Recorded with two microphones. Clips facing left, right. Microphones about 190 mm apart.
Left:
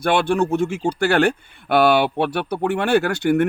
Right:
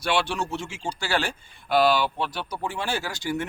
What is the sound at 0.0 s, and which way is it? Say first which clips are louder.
Speech: left 8 dB; 55° left (ahead or behind).